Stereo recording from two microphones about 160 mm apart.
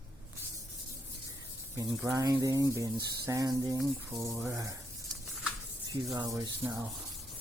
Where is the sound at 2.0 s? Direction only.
20° right (ahead or behind).